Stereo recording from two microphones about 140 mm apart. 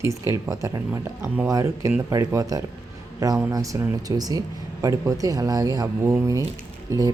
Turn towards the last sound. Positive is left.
turn(degrees=-20)  # may be behind; listen again after turning